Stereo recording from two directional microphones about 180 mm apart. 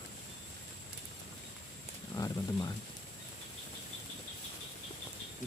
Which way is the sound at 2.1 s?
20° left (ahead or behind).